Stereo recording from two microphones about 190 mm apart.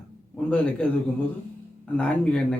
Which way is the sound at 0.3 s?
5° left (ahead or behind).